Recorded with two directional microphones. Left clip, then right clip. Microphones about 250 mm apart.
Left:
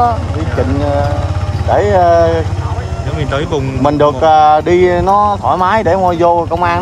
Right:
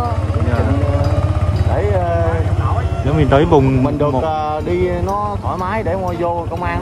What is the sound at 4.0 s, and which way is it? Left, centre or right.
Speech, left.